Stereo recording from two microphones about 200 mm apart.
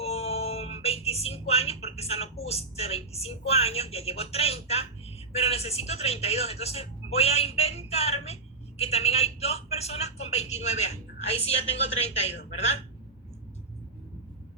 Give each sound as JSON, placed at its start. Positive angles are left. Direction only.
{"t": 0.0, "sound": "speech", "side_deg": 30}